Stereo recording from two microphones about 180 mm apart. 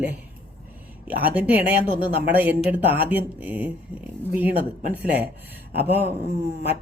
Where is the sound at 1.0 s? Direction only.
10° right (ahead or behind).